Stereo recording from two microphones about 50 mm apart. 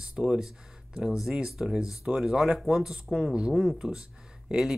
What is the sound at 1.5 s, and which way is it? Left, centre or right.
Speech, centre.